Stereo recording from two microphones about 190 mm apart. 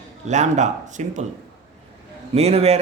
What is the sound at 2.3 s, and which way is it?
Speech, 35° right (ahead or behind).